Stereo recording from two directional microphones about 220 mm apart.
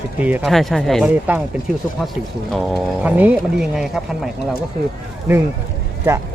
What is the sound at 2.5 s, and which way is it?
Speech, 5° right (ahead or behind).